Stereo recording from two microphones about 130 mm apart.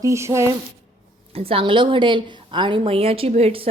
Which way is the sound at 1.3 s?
45° right (ahead or behind).